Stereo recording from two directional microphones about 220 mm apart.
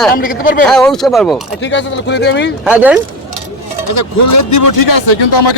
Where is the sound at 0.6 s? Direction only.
Centre (ahead or behind).